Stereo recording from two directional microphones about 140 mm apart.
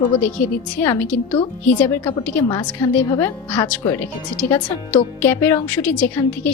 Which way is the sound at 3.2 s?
15° left (ahead or behind).